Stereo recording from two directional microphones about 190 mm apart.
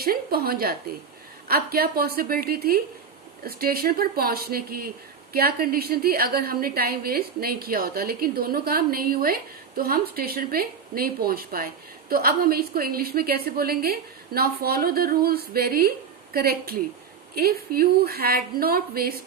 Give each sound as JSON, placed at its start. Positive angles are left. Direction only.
{"t": 0.0, "sound": "a woman's voice", "side_deg": -55}